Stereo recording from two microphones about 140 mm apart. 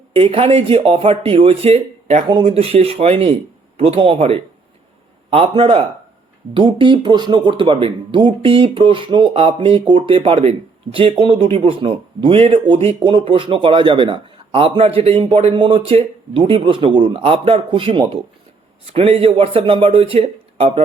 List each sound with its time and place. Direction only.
0.1 s speech: 40° right (ahead or behind)